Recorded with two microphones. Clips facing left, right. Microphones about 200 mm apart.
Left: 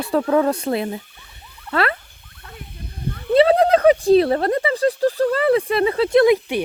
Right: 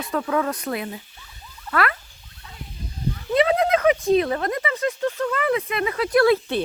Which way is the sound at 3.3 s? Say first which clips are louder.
Left 5 dB; 35° left (ahead or behind).